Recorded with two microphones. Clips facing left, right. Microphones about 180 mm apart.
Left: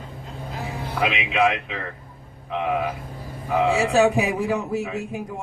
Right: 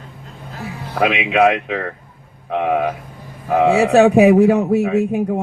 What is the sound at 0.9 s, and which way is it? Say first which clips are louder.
A man's voice: right 7 dB; 60° right (ahead or behind).